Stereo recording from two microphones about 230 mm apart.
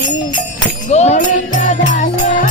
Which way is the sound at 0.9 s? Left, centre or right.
Left.